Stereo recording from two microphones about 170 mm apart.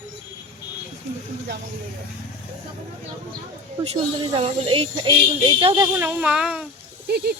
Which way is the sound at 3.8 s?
40° right (ahead or behind).